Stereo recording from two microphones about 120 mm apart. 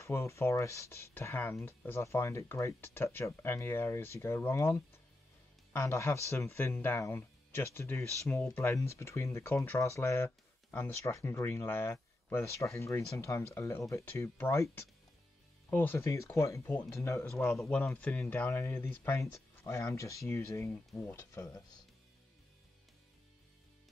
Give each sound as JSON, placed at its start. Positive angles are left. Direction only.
{"t": 0.0, "sound": "speech", "side_deg": 25}
{"t": 17.5, "sound": "speech", "side_deg": 5}
{"t": 20.7, "sound": "speech", "side_deg": 10}